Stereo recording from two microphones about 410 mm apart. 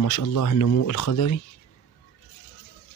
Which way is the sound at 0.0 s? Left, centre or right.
Left.